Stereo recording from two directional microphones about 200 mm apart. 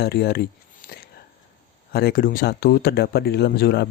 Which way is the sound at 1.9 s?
50° left (ahead or behind).